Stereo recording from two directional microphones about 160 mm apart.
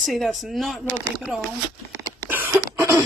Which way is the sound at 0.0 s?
Centre (ahead or behind).